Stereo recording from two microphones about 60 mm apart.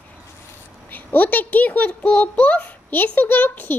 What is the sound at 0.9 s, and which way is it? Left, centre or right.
A child's voice, left.